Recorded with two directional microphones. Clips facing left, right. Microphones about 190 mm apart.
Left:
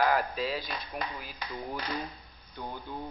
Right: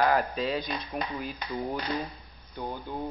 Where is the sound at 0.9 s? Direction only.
40° right (ahead or behind).